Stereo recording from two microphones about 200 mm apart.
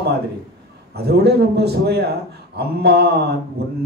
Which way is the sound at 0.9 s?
55° right (ahead or behind).